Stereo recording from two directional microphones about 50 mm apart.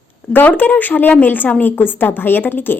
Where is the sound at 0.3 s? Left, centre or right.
Left.